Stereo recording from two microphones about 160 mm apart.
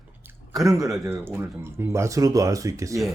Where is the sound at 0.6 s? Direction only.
20° right (ahead or behind).